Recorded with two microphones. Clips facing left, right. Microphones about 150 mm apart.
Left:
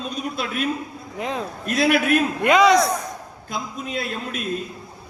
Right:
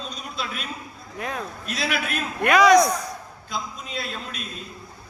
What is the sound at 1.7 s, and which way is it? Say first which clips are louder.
Speech: left 10 dB; 50° left (ahead or behind).